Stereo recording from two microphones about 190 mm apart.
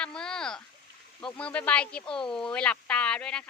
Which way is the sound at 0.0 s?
5° left (ahead or behind).